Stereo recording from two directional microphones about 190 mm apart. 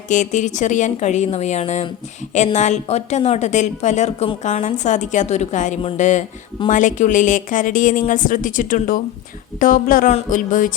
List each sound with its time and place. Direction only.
0.1 s a woman's voice: 40° left (ahead or behind)